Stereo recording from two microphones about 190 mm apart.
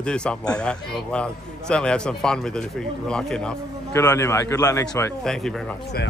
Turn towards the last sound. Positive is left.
turn(degrees=5)  # may be behind; listen again after turning